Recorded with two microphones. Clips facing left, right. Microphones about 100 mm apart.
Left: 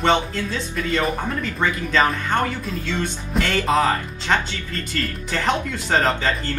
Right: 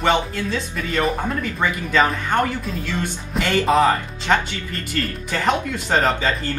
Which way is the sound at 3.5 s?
15° right (ahead or behind).